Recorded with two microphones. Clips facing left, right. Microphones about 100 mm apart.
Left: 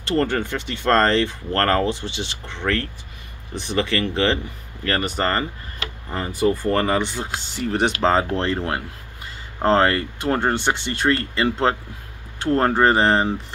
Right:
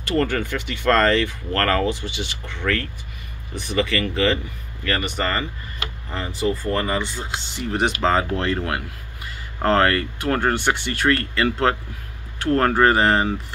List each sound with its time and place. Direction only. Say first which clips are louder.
0.0 s speech: left 1 dB; 30° left (ahead or behind); by 7.1 s 60° left (ahead or behind)
8.0 s speech: left 2 dB; 30° left (ahead or behind)